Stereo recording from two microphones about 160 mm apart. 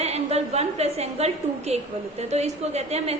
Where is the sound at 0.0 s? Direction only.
40° right (ahead or behind).